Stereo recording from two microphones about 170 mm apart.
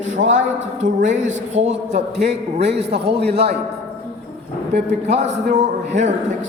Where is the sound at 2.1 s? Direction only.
80° right.